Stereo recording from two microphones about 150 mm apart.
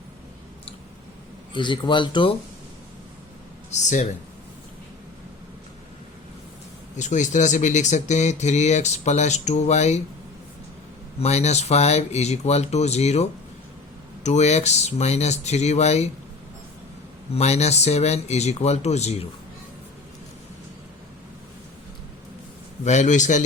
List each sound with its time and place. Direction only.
1.5 s speech: 30° left (ahead or behind)
3.7 s speech: 55° left (ahead or behind)
6.9 s speech: 55° left (ahead or behind)
11.2 s speech: 45° left (ahead or behind)
14.3 s speech: 50° left (ahead or behind)
17.3 s speech: 45° left (ahead or behind)
22.8 s speech: 50° left (ahead or behind)